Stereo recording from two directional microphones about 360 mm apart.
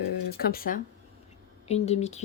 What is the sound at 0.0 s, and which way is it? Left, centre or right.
Speech, left.